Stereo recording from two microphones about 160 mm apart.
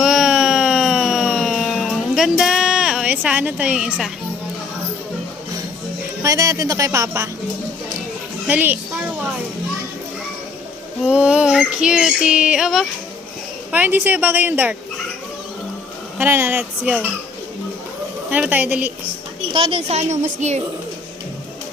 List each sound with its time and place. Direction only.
0.0 s a sound: 5° right (ahead or behind)
6.2 s speech: 20° right (ahead or behind)
8.4 s a woman's voice: 10° right (ahead or behind)
11.0 s child singing: 5° right (ahead or behind)
13.7 s a woman's voice: 10° right (ahead or behind)
16.1 s a woman's voice: 15° right (ahead or behind)
18.3 s a woman's voice: 10° right (ahead or behind)
19.5 s a woman's voice: 35° right (ahead or behind)